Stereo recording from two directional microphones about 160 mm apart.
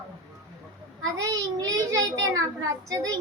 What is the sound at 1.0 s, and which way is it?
A child's voice, 20° right (ahead or behind).